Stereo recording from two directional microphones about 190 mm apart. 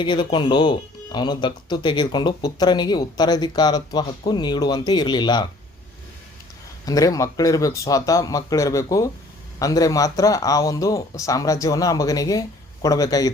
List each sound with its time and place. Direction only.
0.0 s speech: 25° left (ahead or behind)
6.8 s speech: 20° left (ahead or behind)